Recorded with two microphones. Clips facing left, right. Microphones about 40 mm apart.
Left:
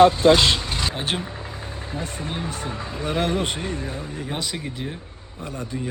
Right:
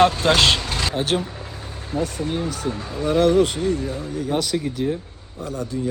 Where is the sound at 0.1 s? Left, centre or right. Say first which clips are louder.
Left 1 dB; right.